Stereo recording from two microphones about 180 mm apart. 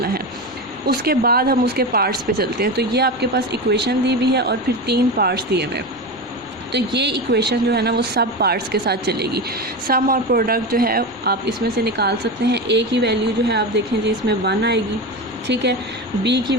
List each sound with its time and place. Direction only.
0.9 s speech: 55° right (ahead or behind)
16.2 s speech: 70° right (ahead or behind)